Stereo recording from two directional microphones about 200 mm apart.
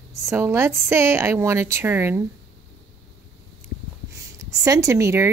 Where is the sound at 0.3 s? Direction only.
15° right (ahead or behind).